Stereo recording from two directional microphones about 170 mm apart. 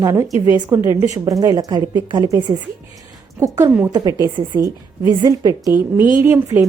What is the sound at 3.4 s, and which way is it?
A woman's voice, 20° right (ahead or behind).